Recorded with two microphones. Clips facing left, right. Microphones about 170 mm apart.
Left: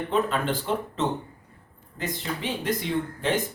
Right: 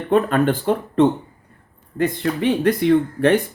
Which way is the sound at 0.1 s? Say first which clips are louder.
Right 10 dB; 55° right (ahead or behind).